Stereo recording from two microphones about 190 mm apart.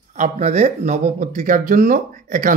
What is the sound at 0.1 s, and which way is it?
Speech, 40° right (ahead or behind).